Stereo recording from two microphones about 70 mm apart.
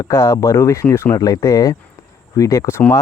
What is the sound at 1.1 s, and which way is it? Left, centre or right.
Speech, left.